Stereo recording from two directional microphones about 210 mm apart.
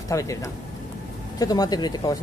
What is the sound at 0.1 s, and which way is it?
Speech, 15° left (ahead or behind).